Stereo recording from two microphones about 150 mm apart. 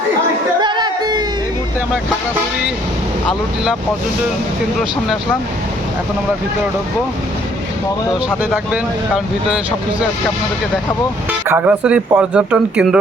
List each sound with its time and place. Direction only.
0.6 s music: 30° right (ahead or behind)
8.7 s speech: 5° right (ahead or behind)
11.4 s speech: 10° right (ahead or behind)